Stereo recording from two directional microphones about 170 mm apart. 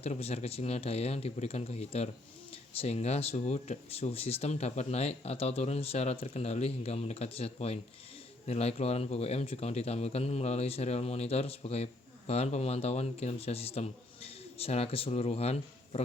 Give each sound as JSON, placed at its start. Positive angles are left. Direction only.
{"t": 0.0, "sound": "speech", "side_deg": 40}